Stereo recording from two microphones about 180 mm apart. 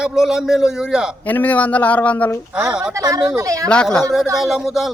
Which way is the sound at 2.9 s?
20° right (ahead or behind).